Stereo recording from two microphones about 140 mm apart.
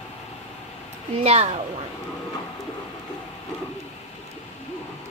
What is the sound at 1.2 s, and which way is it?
Speech, 50° right (ahead or behind).